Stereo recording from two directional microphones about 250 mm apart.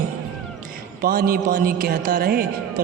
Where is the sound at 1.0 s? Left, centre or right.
Right.